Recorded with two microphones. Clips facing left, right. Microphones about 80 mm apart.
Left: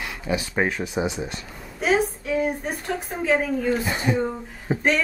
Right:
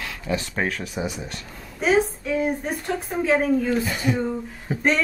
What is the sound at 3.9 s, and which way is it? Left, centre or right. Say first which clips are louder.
Speech: even; left.